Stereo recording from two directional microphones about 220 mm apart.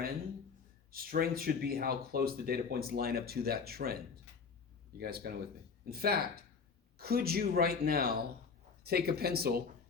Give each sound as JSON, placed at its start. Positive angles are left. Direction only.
{"t": 0.9, "sound": "speech", "side_deg": -40}
{"t": 4.9, "sound": "speech", "side_deg": -45}